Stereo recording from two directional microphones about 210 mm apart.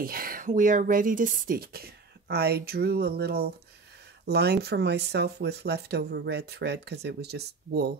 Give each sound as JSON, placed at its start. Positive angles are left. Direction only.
{"t": 0.0, "sound": "speech", "side_deg": -45}